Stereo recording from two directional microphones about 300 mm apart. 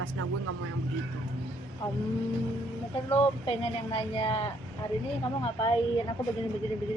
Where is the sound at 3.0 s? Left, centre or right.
Centre.